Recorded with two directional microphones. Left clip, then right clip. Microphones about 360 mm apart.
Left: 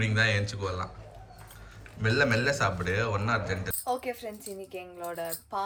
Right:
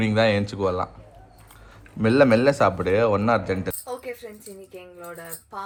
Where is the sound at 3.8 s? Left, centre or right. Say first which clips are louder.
Left 1 dB; centre.